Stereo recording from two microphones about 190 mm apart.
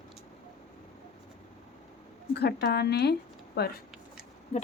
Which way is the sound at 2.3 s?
60° left (ahead or behind).